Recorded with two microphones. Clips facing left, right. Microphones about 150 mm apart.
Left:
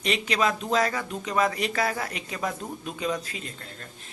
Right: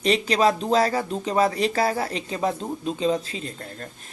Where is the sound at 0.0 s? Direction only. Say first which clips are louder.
Right 6 dB; 35° right (ahead or behind).